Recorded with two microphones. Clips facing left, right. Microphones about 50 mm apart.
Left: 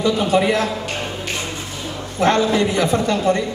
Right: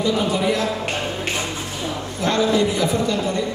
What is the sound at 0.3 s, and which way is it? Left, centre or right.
Speech, left.